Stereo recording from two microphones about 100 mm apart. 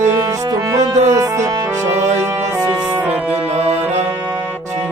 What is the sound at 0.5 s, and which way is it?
Music, 35° right (ahead or behind).